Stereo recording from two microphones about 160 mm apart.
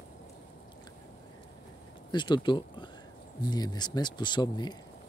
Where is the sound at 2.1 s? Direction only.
30° left (ahead or behind).